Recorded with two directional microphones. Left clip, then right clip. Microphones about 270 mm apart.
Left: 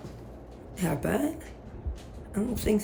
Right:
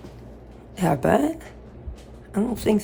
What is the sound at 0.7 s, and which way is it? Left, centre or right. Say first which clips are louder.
A woman's voice: right 10 dB; centre.